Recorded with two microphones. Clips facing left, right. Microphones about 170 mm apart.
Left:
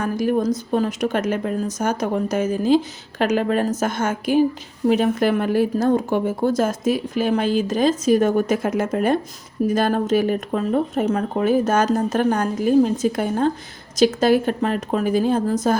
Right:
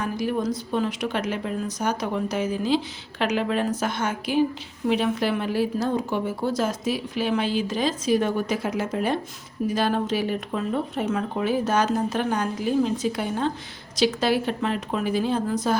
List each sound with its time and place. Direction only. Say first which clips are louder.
0.0 s a woman's voice: left 5 dB; 45° left (ahead or behind)